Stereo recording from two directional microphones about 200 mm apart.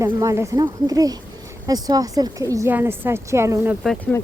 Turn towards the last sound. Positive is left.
turn(degrees=10)  # may be behind; listen again after turning